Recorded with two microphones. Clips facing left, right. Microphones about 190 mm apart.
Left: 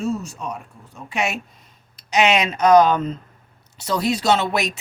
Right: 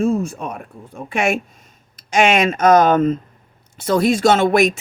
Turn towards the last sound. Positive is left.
turn(degrees=-50)  # may be behind; listen again after turning